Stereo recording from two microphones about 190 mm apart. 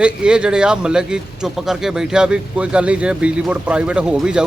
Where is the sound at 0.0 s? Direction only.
5° right (ahead or behind).